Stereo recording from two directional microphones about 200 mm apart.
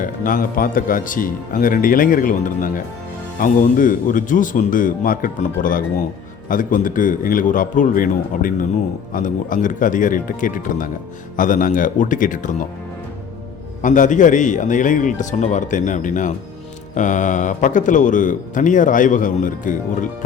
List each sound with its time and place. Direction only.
0.0 s speech: 45° left (ahead or behind)
13.8 s speech: 40° left (ahead or behind)